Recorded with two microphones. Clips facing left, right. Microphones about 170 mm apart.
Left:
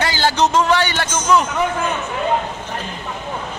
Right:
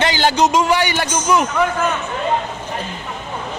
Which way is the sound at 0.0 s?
20° right (ahead or behind).